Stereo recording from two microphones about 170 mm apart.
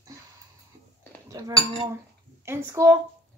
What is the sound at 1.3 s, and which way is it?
A woman's voice, 20° right (ahead or behind).